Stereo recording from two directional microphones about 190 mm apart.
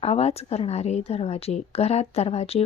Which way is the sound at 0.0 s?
35° left (ahead or behind).